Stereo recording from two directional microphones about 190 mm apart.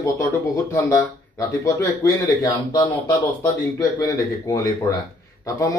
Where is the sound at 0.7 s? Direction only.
15° left (ahead or behind).